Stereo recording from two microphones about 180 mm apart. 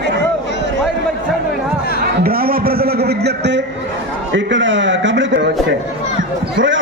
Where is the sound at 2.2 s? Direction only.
55° right (ahead or behind); by 3.7 s 70° right (ahead or behind).